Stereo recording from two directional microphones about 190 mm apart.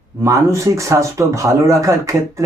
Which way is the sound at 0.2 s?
15° right (ahead or behind).